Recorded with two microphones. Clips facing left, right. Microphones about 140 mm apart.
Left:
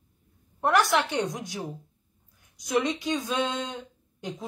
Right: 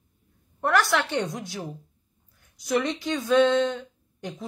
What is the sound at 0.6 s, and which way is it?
A woman's voice, 20° left (ahead or behind).